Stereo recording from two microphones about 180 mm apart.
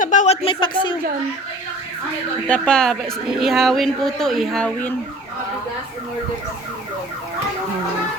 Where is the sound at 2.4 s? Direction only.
5° left (ahead or behind).